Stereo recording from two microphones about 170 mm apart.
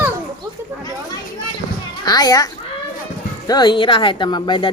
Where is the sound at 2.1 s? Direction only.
20° left (ahead or behind).